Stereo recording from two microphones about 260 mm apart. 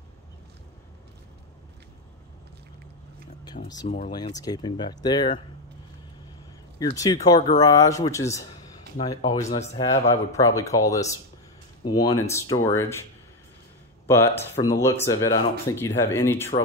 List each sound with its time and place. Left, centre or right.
3.6 s speech: left
4.4 s speech: centre
6.8 s speech: centre
14.0 s speech: centre